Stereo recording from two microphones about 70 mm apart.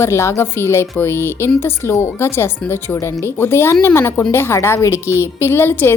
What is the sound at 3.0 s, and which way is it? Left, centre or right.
Speech, left.